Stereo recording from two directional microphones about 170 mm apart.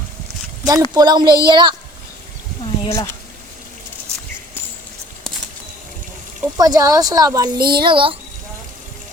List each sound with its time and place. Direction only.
0.6 s a woman's voice: 20° right (ahead or behind)
2.8 s speech: 25° left (ahead or behind)
6.6 s a woman's voice: 20° right (ahead or behind)